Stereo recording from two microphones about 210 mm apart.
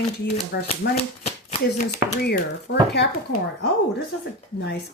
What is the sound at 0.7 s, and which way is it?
Speech, 30° left (ahead or behind).